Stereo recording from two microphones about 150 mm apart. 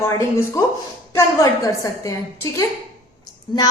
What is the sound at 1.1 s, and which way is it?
A woman's voice, 20° left (ahead or behind).